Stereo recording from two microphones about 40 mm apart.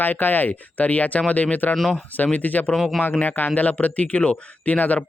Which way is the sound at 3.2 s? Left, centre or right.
Left.